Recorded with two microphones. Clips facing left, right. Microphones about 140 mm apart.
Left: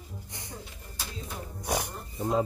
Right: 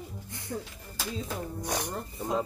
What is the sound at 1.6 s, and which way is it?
Speech, 10° left (ahead or behind).